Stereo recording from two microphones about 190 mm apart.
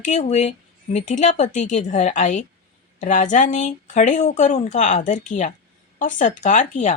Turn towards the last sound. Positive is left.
turn(degrees=40)  # may be behind; listen again after turning